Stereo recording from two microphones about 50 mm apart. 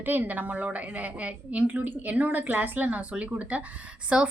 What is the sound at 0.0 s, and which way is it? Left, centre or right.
A woman's voice, right.